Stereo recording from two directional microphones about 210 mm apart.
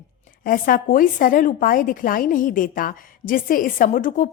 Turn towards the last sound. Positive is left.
turn(degrees=40)  # may be behind; listen again after turning